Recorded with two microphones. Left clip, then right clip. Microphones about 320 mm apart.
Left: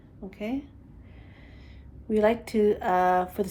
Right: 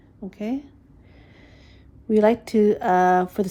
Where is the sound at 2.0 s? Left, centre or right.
Right.